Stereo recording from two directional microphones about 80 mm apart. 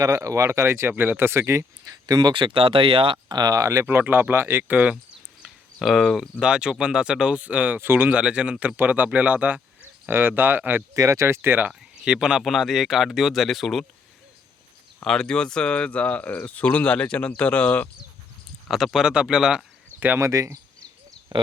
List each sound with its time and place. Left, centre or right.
0.0 s speech: right
2.0 s speech: right
3.5 s speech: right
3.8 s speech: right
5.4 s a sound: centre
6.4 s speech: centre
10.9 s speech: right
11.7 s speech: centre
15.0 s speech: centre
18.7 s speech: centre
20.1 s speech: right
21.3 s speech: right